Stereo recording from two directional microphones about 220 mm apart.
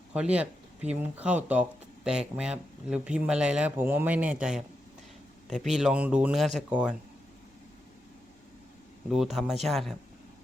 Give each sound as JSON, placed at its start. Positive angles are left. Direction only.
{"t": 0.1, "sound": "speech", "side_deg": -5}
{"t": 5.5, "sound": "speech", "side_deg": -30}
{"t": 5.7, "sound": "speech", "side_deg": -5}
{"t": 9.0, "sound": "speech", "side_deg": 0}